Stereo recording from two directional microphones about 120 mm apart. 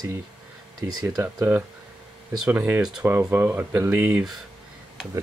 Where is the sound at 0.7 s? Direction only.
30° right (ahead or behind).